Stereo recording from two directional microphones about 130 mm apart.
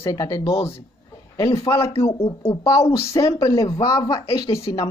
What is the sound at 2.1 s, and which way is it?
Speech, 45° left (ahead or behind).